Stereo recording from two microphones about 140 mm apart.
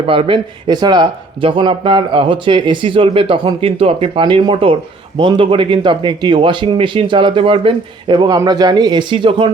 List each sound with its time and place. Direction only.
0.0 s speech: 40° right (ahead or behind)